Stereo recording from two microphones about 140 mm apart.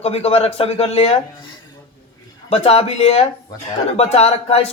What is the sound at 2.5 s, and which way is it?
Speech, 45° left (ahead or behind).